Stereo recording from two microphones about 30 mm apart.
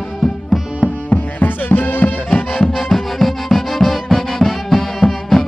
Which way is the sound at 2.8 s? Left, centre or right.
Centre.